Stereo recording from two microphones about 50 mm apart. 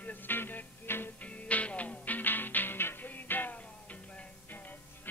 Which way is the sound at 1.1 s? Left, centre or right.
Left.